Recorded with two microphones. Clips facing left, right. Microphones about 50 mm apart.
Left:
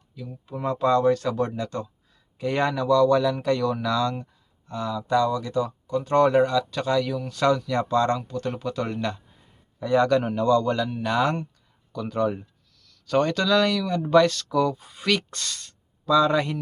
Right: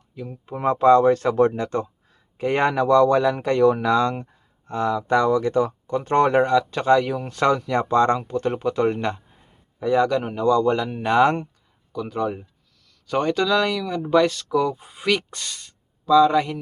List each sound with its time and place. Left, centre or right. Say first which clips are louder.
0.1 s speech: right 3 dB; right
9.8 s speech: right 1 dB; centre; by 11.4 s right
11.9 s speech: even; centre